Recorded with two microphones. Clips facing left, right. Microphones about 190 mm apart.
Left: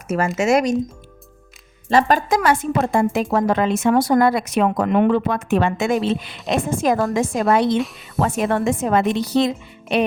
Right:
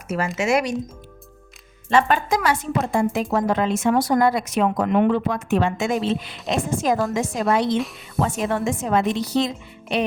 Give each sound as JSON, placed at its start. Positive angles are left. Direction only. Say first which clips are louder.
{"t": 0.3, "sound": "speech", "louder": "left 4 dB", "side_deg": 45}
{"t": 1.9, "sound": "a woman's voice", "louder": "left 2 dB", "side_deg": 40}